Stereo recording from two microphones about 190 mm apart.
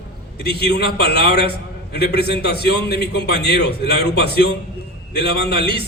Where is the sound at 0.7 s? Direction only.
60° left (ahead or behind).